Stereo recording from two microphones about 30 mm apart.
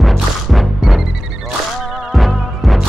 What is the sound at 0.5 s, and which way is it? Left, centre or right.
Music, centre.